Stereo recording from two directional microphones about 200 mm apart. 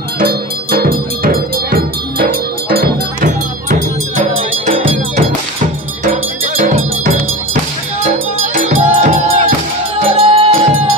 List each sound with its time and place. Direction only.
0.2 s music: 50° right (ahead or behind)
4.4 s music: 35° right (ahead or behind)
6.4 s music: 40° right (ahead or behind)
8.5 s music: 40° right (ahead or behind)